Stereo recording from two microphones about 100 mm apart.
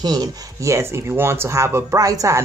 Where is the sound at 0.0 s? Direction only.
40° right (ahead or behind).